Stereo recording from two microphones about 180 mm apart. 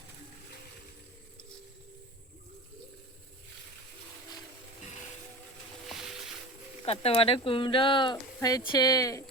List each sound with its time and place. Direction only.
6.8 s speech: 35° left (ahead or behind)